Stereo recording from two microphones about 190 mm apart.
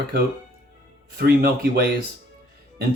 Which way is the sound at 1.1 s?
55° right (ahead or behind).